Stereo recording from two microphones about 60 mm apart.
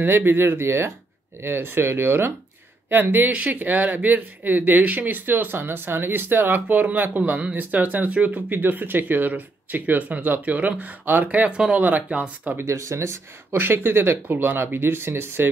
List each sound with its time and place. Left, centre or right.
0.0 s speech: right
12.6 s speech: right